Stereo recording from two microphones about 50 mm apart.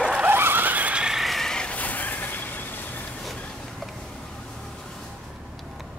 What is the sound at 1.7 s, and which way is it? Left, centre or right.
Vehicle, left.